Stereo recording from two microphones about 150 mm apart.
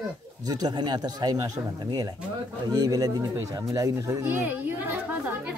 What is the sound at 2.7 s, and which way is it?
Speech, 25° right (ahead or behind).